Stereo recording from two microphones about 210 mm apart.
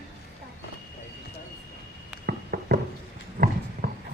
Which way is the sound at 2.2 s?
50° right (ahead or behind).